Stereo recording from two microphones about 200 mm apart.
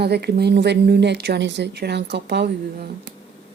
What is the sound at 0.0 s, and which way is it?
Speech, 55° right (ahead or behind).